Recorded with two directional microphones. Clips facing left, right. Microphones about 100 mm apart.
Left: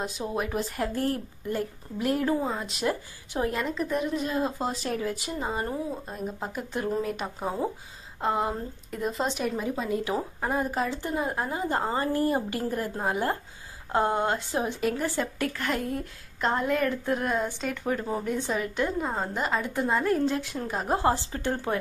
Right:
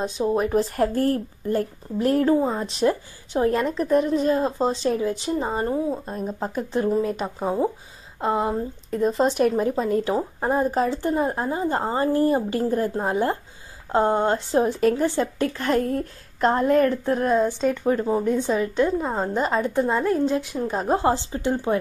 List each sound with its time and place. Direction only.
0.3 s a woman's voice: 35° right (ahead or behind)
7.0 s a woman's voice: 25° right (ahead or behind)
9.4 s speech: 45° right (ahead or behind)
10.0 s a woman's voice: 30° right (ahead or behind)
15.0 s a woman's voice: 30° right (ahead or behind)
15.9 s a woman's voice: 45° right (ahead or behind); by 21.7 s 20° right (ahead or behind)